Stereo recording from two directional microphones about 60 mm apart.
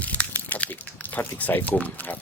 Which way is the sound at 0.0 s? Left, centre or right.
Left.